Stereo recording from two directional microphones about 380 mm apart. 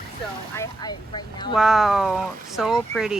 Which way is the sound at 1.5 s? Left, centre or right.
Centre.